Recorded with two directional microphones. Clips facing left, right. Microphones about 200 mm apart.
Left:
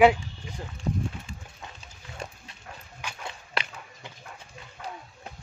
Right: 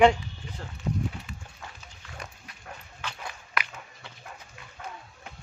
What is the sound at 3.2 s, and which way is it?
Walk, 30° left (ahead or behind).